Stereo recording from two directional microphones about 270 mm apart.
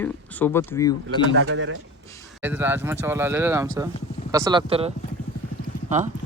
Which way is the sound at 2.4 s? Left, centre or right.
Centre.